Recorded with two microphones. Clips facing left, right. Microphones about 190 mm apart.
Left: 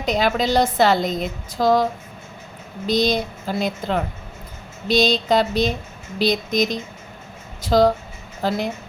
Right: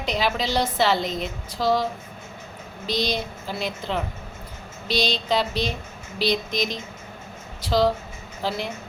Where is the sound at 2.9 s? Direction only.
45° left (ahead or behind).